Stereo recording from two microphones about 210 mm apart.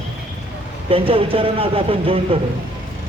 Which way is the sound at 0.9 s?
25° right (ahead or behind).